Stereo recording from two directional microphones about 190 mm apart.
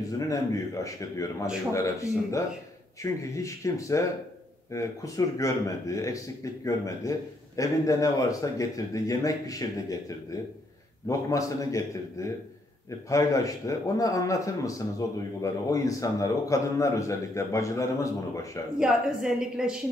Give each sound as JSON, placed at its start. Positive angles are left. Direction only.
{"t": 0.0, "sound": "a man's voice", "side_deg": 15}
{"t": 18.8, "sound": "a woman's voice", "side_deg": -5}